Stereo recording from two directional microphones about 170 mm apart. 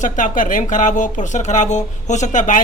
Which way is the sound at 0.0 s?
50° left (ahead or behind).